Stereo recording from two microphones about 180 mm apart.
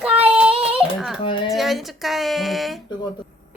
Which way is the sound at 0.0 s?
5° right (ahead or behind).